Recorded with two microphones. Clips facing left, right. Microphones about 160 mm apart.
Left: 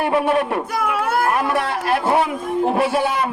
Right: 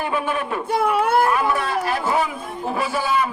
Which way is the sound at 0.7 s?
30° right (ahead or behind).